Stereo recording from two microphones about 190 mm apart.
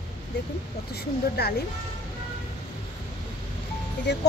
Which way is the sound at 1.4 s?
60° left (ahead or behind).